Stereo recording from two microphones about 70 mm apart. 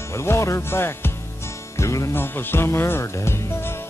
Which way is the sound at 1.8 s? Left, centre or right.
Left.